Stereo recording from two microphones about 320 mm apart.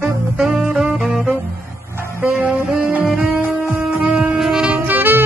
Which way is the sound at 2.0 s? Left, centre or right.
Centre.